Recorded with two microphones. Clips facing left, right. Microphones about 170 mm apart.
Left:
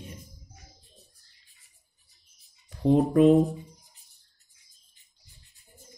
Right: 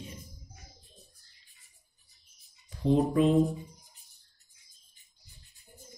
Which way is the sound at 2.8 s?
55° left (ahead or behind).